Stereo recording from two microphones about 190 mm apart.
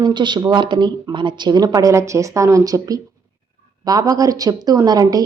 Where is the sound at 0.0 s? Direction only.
25° right (ahead or behind).